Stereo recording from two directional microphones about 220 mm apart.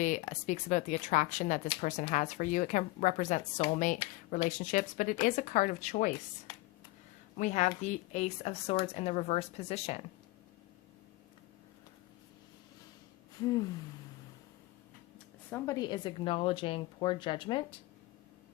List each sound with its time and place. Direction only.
0.0 s speech: 35° left (ahead or behind)
7.3 s a woman's voice: 30° left (ahead or behind)
13.3 s a sound: 15° left (ahead or behind)
15.4 s a woman's voice: 10° left (ahead or behind)